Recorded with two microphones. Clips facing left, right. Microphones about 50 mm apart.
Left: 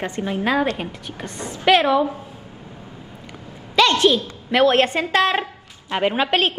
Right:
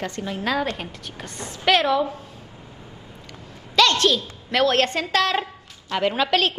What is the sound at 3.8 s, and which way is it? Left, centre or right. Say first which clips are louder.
A woman's voice: left 3 dB; centre.